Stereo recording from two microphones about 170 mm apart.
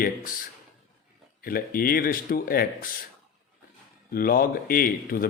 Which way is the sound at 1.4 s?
60° left (ahead or behind).